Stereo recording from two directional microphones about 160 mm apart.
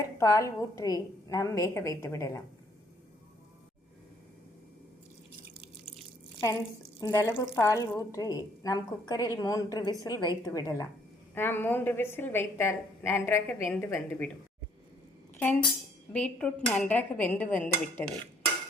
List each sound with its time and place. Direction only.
0.2 s speech: 20° left (ahead or behind)
7.0 s speech: 20° left (ahead or behind)
11.3 s a woman's voice: 10° left (ahead or behind)
16.1 s a woman's voice: 5° left (ahead or behind)